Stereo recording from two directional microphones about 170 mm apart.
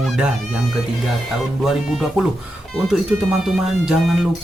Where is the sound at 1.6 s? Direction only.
5° right (ahead or behind).